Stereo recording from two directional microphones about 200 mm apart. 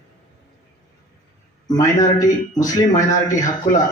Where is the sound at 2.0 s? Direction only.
15° left (ahead or behind).